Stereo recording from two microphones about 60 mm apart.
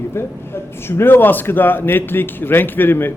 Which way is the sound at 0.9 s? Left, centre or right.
Left.